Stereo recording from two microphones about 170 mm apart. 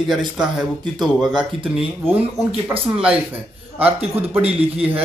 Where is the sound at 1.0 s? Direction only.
5° right (ahead or behind).